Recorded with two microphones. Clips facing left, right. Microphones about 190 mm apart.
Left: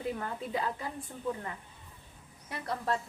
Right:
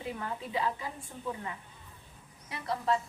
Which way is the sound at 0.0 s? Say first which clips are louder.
Left 2 dB; 45° left (ahead or behind).